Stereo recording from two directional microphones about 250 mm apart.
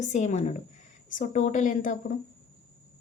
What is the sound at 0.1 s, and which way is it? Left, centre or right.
A woman's voice, left.